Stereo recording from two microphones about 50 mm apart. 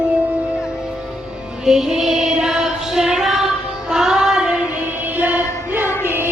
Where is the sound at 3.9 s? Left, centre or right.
Centre.